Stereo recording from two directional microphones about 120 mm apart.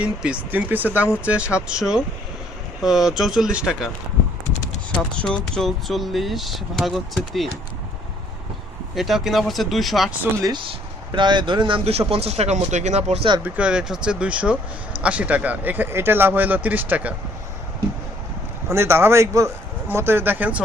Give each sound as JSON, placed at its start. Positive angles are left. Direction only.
{"t": 0.0, "sound": "speech", "side_deg": -10}
{"t": 4.9, "sound": "speech", "side_deg": 10}
{"t": 9.0, "sound": "speech", "side_deg": 0}
{"t": 10.4, "sound": "speech", "side_deg": -40}
{"t": 11.9, "sound": "speech", "side_deg": -55}
{"t": 13.4, "sound": "speech", "side_deg": -10}
{"t": 18.7, "sound": "a man's voice", "side_deg": -20}